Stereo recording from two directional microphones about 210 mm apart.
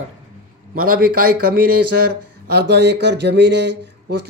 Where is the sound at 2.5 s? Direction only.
50° right (ahead or behind).